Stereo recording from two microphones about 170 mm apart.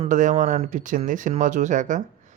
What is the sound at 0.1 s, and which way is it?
Speech, 45° right (ahead or behind).